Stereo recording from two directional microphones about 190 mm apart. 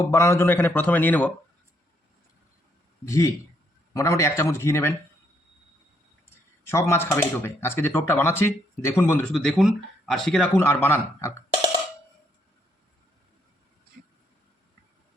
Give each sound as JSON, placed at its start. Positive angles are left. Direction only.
{"t": 0.0, "sound": "speech", "side_deg": 15}
{"t": 3.1, "sound": "speech", "side_deg": 15}
{"t": 6.7, "sound": "speech", "side_deg": 15}
{"t": 9.3, "sound": "speech", "side_deg": 0}